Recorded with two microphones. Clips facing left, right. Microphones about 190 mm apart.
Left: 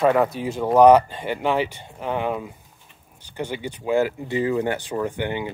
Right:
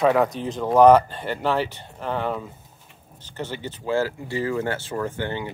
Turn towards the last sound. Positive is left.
turn(degrees=15)  # may be behind; listen again after turning